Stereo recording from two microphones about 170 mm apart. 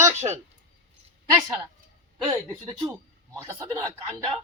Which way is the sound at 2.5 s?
20° right (ahead or behind).